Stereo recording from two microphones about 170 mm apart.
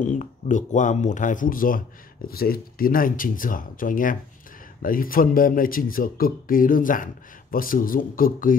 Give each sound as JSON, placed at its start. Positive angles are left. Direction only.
{"t": 0.0, "sound": "speech", "side_deg": 45}